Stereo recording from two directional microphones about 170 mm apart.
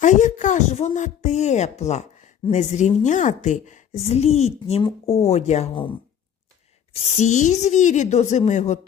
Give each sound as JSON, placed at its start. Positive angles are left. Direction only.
{"t": 0.0, "sound": "speech", "side_deg": 45}
{"t": 6.9, "sound": "speech", "side_deg": 40}